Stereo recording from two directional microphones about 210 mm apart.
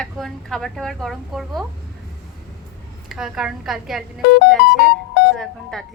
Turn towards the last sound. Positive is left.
turn(degrees=0)  # may be behind; listen again after turning